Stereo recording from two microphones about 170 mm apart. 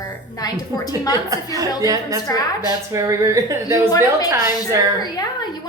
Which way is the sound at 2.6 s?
20° right (ahead or behind).